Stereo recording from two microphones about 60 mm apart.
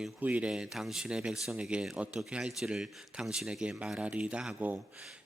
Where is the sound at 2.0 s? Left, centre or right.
Centre.